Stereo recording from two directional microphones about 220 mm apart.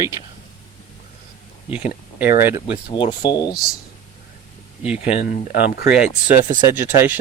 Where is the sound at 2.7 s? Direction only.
25° left (ahead or behind).